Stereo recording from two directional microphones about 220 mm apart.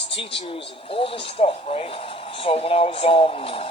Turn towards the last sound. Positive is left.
turn(degrees=25)  # may be behind; listen again after turning